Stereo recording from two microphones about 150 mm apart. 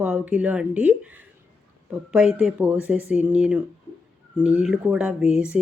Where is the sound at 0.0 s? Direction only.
10° right (ahead or behind).